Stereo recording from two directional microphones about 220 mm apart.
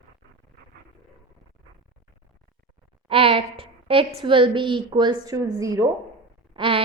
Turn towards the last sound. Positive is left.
turn(degrees=-25)  # may be behind; listen again after turning